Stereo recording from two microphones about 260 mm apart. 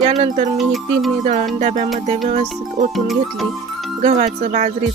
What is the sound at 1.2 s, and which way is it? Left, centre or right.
Speech, right.